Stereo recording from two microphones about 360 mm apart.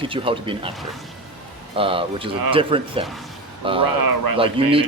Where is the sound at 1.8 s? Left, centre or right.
Centre.